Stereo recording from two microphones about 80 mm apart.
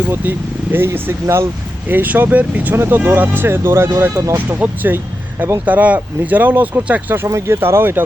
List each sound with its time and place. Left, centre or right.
0.1 s speech: right
2.7 s speech: right
4.4 s speech: right